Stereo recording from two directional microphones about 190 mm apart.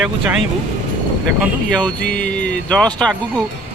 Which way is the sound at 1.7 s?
5° left (ahead or behind).